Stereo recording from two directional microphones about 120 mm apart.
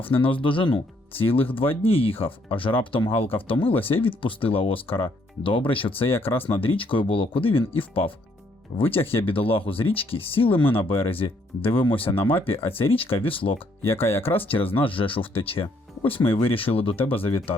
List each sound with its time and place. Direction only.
0.0 s speech: 50° left (ahead or behind)
13.8 s speech: 20° left (ahead or behind)
14.2 s speech: 50° left (ahead or behind)